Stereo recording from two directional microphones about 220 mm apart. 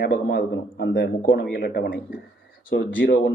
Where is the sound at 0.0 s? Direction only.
45° left (ahead or behind).